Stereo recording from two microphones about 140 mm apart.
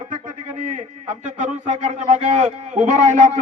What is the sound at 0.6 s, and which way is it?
Speech, 60° right (ahead or behind).